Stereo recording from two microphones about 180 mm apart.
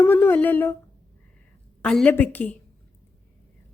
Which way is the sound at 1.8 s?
5° left (ahead or behind).